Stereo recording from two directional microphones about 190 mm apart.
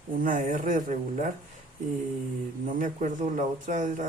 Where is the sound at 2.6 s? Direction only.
45° right (ahead or behind).